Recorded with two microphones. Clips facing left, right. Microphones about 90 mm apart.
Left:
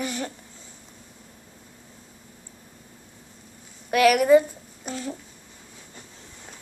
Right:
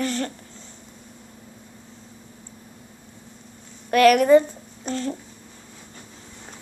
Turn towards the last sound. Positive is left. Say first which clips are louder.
# right 5 dB
turn(degrees=5)  # may be behind; listen again after turning